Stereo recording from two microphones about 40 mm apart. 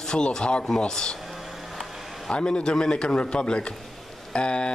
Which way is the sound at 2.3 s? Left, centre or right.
Left.